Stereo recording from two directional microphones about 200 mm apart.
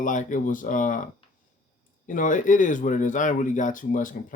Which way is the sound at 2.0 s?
40° left (ahead or behind).